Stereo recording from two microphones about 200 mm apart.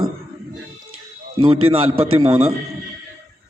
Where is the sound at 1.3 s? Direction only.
25° right (ahead or behind).